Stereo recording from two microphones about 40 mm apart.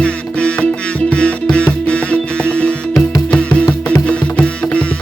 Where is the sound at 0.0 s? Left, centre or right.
Left.